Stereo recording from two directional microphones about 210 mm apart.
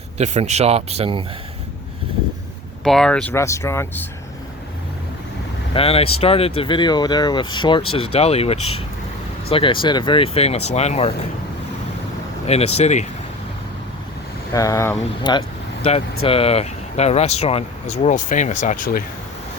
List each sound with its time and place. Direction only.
0.2 s speech: 35° right (ahead or behind)
2.8 s speech: centre (ahead or behind)
5.7 s speech: 25° left (ahead or behind)
12.5 s speech: 30° left (ahead or behind)
14.5 s speech: 15° left (ahead or behind); by 19.0 s 40° left (ahead or behind)